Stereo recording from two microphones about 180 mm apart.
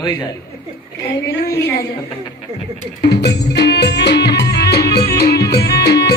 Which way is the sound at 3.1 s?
70° left (ahead or behind).